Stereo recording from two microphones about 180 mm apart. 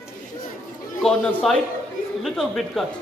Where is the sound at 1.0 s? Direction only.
Centre (ahead or behind).